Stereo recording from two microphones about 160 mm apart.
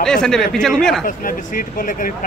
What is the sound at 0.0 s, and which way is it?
Speech, 5° left (ahead or behind).